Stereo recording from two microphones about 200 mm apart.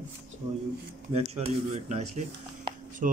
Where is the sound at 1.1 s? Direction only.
30° right (ahead or behind).